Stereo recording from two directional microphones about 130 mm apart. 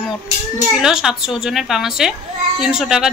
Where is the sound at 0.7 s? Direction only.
5° right (ahead or behind).